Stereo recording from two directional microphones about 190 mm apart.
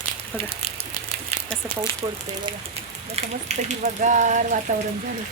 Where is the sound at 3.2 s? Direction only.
35° right (ahead or behind).